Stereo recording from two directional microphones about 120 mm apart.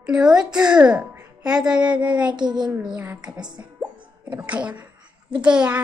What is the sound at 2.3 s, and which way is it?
Speech, 40° right (ahead or behind).